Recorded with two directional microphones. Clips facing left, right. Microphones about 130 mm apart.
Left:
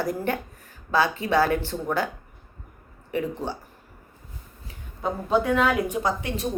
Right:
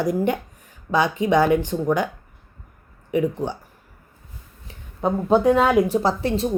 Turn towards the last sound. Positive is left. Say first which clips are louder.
# right 5 dB
turn(degrees=-30)  # may be behind; listen again after turning